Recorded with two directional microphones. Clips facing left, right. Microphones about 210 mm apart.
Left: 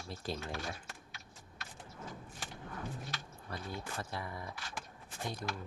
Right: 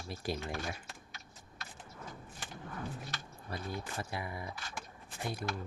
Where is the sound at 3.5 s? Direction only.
10° right (ahead or behind).